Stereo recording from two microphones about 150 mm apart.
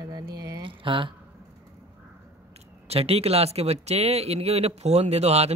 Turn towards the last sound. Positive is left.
turn(degrees=-45)  # may be behind; listen again after turning